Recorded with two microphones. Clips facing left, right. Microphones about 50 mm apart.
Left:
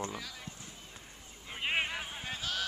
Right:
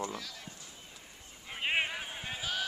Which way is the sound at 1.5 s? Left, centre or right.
Centre.